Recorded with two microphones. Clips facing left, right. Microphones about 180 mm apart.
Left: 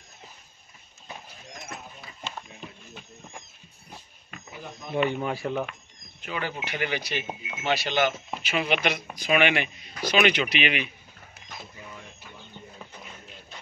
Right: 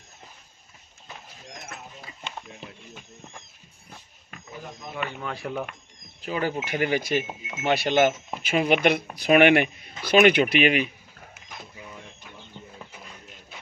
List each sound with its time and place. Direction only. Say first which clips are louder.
5.0 s speech: left 8 dB; 25° left (ahead or behind)
5.3 s speech: left 2 dB; centre (ahead or behind)
6.2 s speech: right 5 dB; 35° right (ahead or behind)